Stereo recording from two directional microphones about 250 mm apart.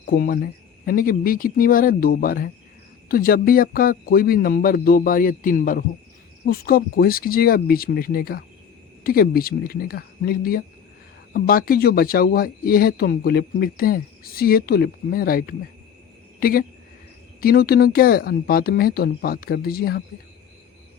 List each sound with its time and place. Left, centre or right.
0.1 s speech: left